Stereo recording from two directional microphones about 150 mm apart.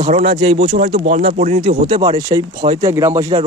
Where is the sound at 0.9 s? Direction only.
45° right (ahead or behind).